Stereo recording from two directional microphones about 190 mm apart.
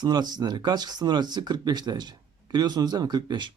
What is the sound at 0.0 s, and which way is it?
Speech, 20° right (ahead or behind).